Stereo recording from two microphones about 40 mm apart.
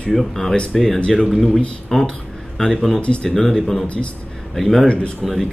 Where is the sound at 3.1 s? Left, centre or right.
Centre.